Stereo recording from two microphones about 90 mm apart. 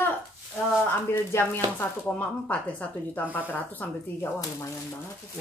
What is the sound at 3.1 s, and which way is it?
Speech, 20° left (ahead or behind).